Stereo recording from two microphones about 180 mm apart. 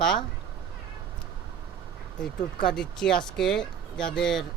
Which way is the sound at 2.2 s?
5° left (ahead or behind).